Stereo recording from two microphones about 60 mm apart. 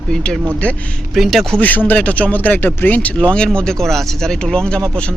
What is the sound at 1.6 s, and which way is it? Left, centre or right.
Speech, left.